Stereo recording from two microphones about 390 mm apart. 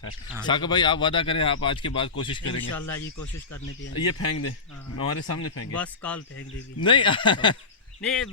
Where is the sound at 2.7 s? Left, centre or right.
Left.